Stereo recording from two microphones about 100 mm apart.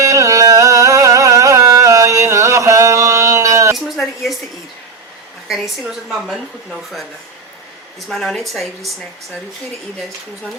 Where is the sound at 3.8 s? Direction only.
Centre (ahead or behind).